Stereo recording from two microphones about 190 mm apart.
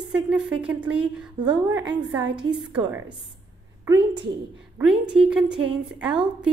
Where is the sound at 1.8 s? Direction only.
20° right (ahead or behind).